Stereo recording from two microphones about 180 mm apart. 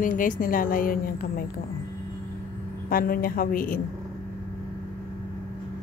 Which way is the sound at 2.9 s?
55° left (ahead or behind).